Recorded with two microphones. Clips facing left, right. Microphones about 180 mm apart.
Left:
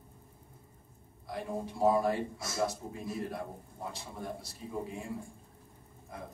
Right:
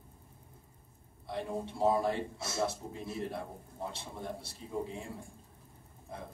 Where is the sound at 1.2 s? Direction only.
25° right (ahead or behind).